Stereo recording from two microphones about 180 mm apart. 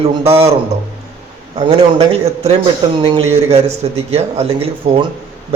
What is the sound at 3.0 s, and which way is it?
A man's voice, 30° right (ahead or behind).